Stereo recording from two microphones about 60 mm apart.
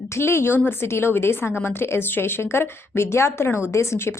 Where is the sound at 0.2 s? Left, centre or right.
Left.